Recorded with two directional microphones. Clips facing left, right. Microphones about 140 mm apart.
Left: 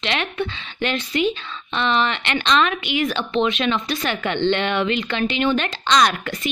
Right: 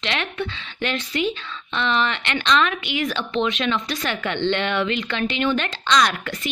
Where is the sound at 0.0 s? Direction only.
20° left (ahead or behind).